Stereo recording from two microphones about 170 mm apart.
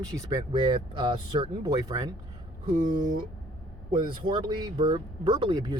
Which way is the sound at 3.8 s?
25° right (ahead or behind).